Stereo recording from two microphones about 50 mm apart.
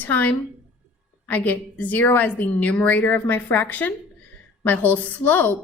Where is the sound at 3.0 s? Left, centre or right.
Left.